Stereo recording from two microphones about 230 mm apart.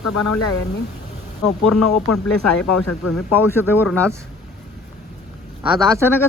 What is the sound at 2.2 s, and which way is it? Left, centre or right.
Speech, centre.